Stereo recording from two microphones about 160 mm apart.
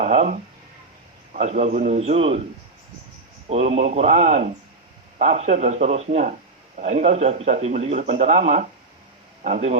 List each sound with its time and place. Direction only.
0.0 s speech: 45° right (ahead or behind)
3.5 s speech: 40° right (ahead or behind)